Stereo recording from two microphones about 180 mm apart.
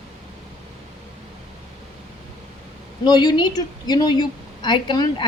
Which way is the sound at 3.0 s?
25° left (ahead or behind).